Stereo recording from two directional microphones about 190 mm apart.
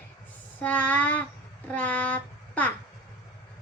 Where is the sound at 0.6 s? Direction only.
10° left (ahead or behind).